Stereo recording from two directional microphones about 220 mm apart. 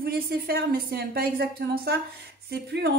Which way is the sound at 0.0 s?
45° right (ahead or behind).